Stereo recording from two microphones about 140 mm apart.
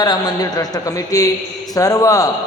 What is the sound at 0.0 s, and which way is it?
A man's voice, 30° left (ahead or behind).